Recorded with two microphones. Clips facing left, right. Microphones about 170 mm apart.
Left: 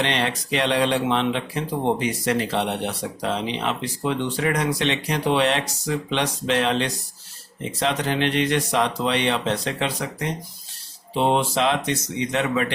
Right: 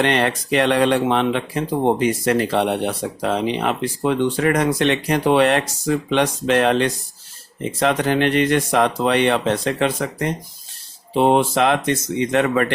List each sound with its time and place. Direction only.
0.0 s speech: 55° right (ahead or behind)